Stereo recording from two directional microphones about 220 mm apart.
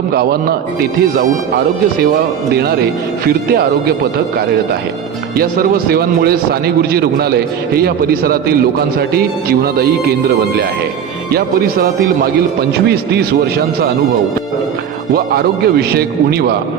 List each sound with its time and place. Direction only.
0.1 s a man's voice: 45° right (ahead or behind)
5.4 s a man's voice: 40° right (ahead or behind)
15.1 s a man's voice: 45° right (ahead or behind)